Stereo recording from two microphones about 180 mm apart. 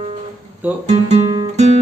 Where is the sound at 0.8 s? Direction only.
35° right (ahead or behind).